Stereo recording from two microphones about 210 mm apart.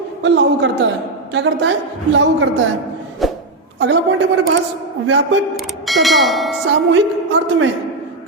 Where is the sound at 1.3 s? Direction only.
55° right (ahead or behind).